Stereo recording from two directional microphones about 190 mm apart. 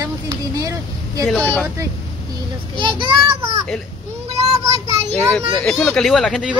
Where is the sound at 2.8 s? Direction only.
25° right (ahead or behind).